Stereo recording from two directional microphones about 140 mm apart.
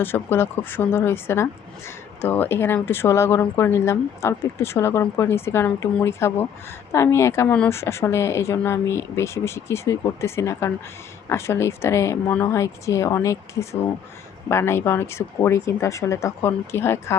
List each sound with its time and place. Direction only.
0.0 s a woman's voice: 15° left (ahead or behind)
7.5 s a woman's voice: 10° left (ahead or behind)
7.8 s a woman's voice: 20° left (ahead or behind)